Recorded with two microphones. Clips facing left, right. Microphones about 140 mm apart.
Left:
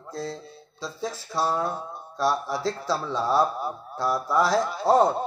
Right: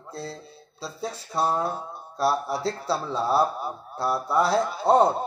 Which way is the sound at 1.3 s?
30° right (ahead or behind).